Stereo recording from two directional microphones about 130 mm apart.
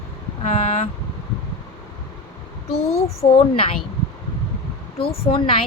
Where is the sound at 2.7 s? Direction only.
50° left (ahead or behind).